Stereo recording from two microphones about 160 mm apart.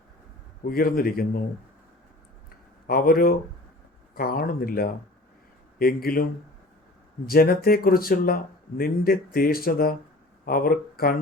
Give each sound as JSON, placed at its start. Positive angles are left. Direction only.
{"t": 0.7, "sound": "speech", "side_deg": 65}
{"t": 2.8, "sound": "speech", "side_deg": 70}
{"t": 7.3, "sound": "speech", "side_deg": 70}